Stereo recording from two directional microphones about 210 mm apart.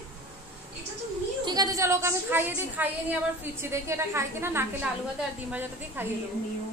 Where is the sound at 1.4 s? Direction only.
20° right (ahead or behind).